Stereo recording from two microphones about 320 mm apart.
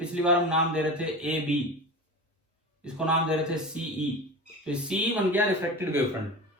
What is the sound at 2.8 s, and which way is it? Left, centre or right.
Speech, centre.